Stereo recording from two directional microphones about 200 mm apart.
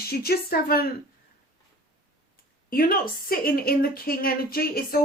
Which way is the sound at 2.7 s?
45° left (ahead or behind).